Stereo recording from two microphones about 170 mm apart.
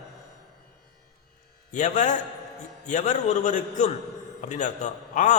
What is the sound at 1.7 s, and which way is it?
A man's voice, 45° left (ahead or behind).